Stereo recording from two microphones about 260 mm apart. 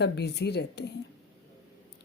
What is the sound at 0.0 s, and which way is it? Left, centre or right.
Speech, left.